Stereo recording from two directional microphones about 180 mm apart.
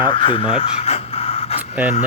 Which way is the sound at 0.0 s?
25° left (ahead or behind).